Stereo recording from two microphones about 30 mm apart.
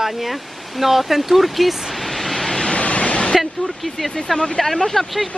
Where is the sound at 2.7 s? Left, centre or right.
Left.